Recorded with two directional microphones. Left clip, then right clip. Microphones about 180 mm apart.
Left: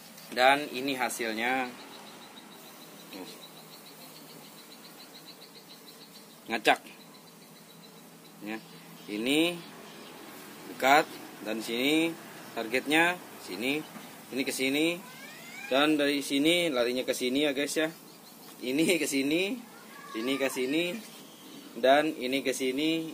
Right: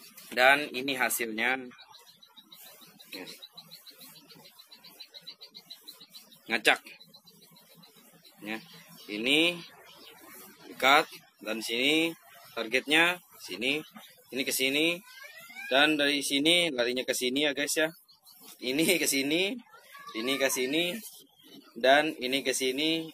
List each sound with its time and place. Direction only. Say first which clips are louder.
0.3 s speech: right 1 dB; 10° left (ahead or behind)
6.4 s speech: even; 10° left (ahead or behind)
9.1 s speech: right 2 dB; 15° left (ahead or behind)
10.8 s speech: even; 10° left (ahead or behind)